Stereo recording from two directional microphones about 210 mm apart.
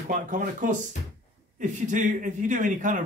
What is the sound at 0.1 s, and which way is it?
Speech, 40° right (ahead or behind).